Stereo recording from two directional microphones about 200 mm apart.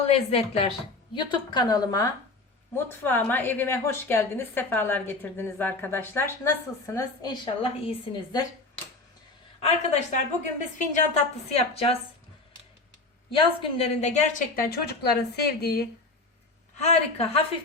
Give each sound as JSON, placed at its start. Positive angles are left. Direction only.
{"t": 0.0, "sound": "a woman's voice", "side_deg": 30}
{"t": 9.6, "sound": "a woman's voice", "side_deg": 35}
{"t": 13.3, "sound": "a woman's voice", "side_deg": 30}
{"t": 14.7, "sound": "a woman's voice", "side_deg": 55}
{"t": 16.7, "sound": "a woman's voice", "side_deg": 30}